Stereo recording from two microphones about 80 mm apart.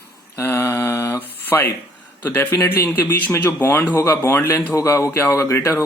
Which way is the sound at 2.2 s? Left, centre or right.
Left.